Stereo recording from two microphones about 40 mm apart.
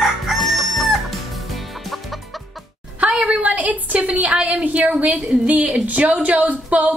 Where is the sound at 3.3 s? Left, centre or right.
Right.